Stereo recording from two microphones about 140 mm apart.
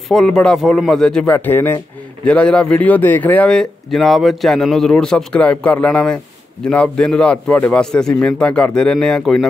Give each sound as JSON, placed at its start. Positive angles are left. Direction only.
{"t": 0.1, "sound": "speech", "side_deg": 5}